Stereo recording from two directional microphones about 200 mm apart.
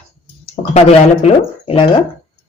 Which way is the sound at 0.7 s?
30° left (ahead or behind).